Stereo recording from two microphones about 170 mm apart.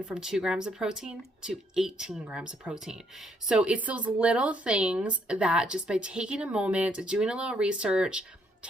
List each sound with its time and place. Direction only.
0.1 s speech: 5° right (ahead or behind)